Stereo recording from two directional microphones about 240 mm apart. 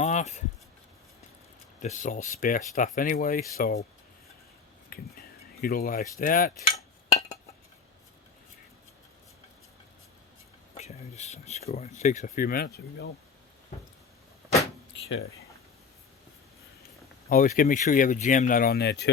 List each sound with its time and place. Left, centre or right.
0.0 s a sound: left
1.8 s speech: left
4.9 s cutlery: left
10.8 s speech: left
17.2 s speech: left